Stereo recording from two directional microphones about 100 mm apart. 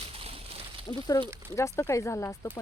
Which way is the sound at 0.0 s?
70° right (ahead or behind).